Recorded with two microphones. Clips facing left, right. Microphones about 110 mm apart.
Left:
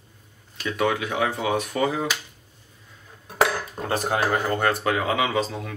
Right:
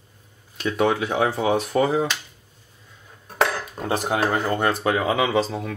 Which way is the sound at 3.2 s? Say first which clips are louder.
Even; 5° left (ahead or behind).